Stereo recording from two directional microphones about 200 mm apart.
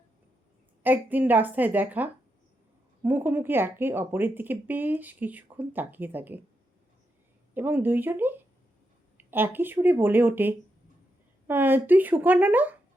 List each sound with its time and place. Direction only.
0.8 s speech: 10° right (ahead or behind)
7.5 s speech: 10° right (ahead or behind)